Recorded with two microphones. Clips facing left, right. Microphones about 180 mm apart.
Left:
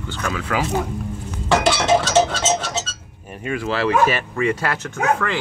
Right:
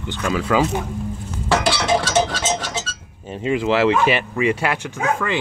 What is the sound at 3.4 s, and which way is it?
Speech, 20° right (ahead or behind).